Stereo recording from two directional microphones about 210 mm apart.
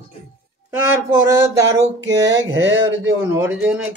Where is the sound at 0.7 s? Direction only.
10° right (ahead or behind).